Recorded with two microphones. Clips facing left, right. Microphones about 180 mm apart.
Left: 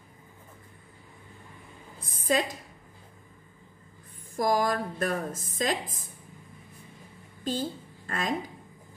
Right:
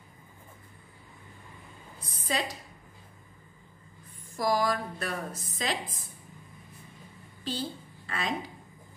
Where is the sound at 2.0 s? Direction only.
50° left (ahead or behind).